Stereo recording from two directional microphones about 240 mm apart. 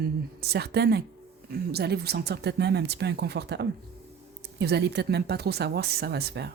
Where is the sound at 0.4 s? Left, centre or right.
Right.